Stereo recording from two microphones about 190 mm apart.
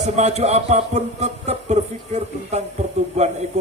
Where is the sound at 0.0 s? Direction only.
35° right (ahead or behind).